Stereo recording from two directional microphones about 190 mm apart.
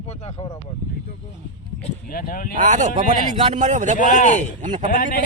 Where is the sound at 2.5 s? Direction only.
40° right (ahead or behind).